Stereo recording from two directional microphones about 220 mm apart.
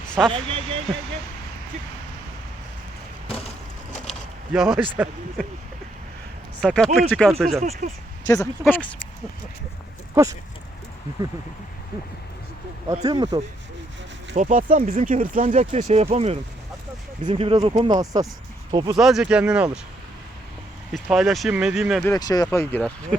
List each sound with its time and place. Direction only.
0.3 s speech: 25° right (ahead or behind)
3.2 s a sound: 25° left (ahead or behind)
4.5 s speech: centre (ahead or behind)
6.6 s speech: 5° left (ahead or behind)
7.6 s speech: 35° right (ahead or behind)
8.3 s speech: 10° left (ahead or behind)
12.9 s speech: 15° right (ahead or behind)
14.3 s speech: 35° right (ahead or behind); by 18.9 s 15° right (ahead or behind)
18.9 s speech: centre (ahead or behind)
20.9 s speech: centre (ahead or behind)
22.0 s speech: 15° left (ahead or behind)